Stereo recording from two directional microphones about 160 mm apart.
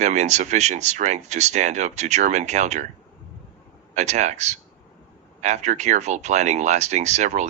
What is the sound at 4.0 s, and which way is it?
Speech, 45° right (ahead or behind).